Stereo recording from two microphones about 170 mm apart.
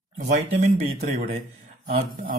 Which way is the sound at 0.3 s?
45° right (ahead or behind).